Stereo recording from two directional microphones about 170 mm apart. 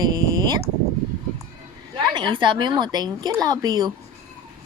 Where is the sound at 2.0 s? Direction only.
25° right (ahead or behind).